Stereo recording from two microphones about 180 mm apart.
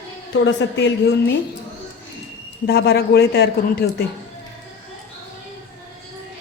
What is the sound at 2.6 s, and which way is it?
A woman's voice, 65° left (ahead or behind).